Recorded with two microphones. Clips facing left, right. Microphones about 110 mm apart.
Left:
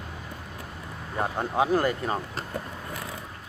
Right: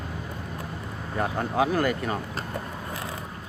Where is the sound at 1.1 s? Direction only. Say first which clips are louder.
Right 1 dB; 25° left (ahead or behind).